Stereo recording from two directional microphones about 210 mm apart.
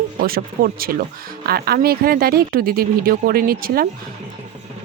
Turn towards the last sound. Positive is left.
turn(degrees=-45)  # may be behind; listen again after turning